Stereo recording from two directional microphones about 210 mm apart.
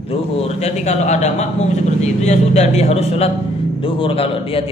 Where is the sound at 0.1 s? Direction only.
30° left (ahead or behind).